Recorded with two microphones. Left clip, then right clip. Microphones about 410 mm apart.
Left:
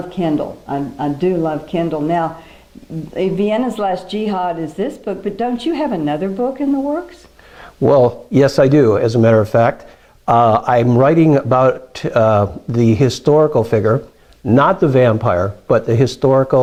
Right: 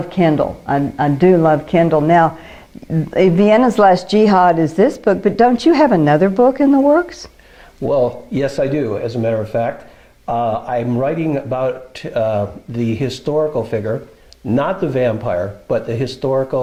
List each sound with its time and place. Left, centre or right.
0.1 s speech: right
7.9 s speech: left